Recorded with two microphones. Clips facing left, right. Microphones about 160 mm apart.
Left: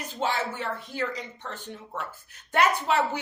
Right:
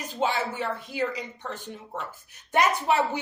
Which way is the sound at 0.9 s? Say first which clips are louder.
Right 4 dB; 10° right (ahead or behind).